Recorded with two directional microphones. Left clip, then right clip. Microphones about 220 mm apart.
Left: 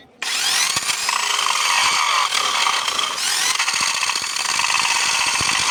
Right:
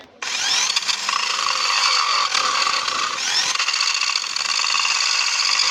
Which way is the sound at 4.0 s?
20° left (ahead or behind).